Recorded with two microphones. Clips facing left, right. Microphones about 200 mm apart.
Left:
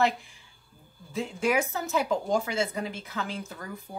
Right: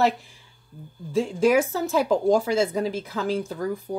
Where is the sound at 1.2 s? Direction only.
30° right (ahead or behind).